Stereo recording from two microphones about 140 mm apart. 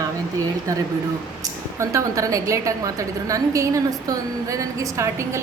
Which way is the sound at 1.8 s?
20° right (ahead or behind).